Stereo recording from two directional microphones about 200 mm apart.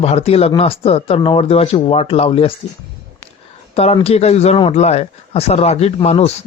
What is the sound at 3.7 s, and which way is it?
Speech, 30° left (ahead or behind).